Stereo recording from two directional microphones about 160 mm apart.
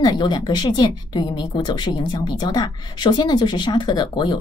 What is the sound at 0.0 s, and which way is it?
A woman's voice, 30° left (ahead or behind).